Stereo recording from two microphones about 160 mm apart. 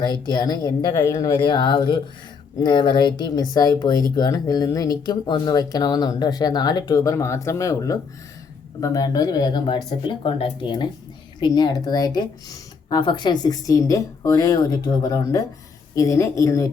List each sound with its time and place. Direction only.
0.0 s speech: 25° left (ahead or behind)